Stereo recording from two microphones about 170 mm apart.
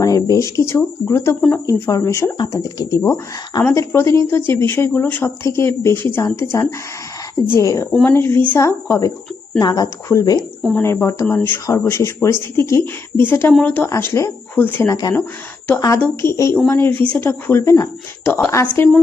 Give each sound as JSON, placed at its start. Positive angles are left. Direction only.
{"t": 0.0, "sound": "speech", "side_deg": 20}
{"t": 1.6, "sound": "speech", "side_deg": 20}
{"t": 7.9, "sound": "speech", "side_deg": 0}
{"t": 8.1, "sound": "a woman's voice", "side_deg": 15}
{"t": 10.6, "sound": "speech", "side_deg": 0}
{"t": 10.8, "sound": "speech", "side_deg": 15}
{"t": 16.2, "sound": "speech", "side_deg": 15}